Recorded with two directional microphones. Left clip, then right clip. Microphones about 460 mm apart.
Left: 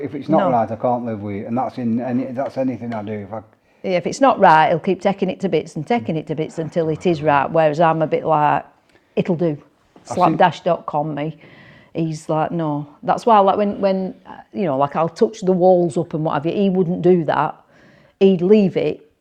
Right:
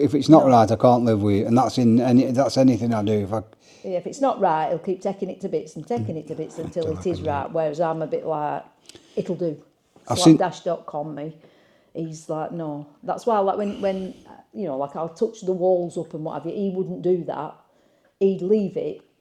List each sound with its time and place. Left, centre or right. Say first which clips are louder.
0.0 s a man's voice: right 3 dB; right
3.8 s a woman's voice: left 7 dB; left
14.5 s speech: left 9 dB; left